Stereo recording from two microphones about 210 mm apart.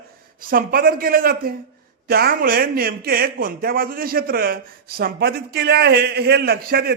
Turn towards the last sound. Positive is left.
turn(degrees=-45)  # may be behind; listen again after turning